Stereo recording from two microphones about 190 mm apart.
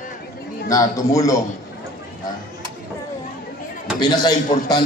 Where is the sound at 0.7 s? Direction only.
15° left (ahead or behind).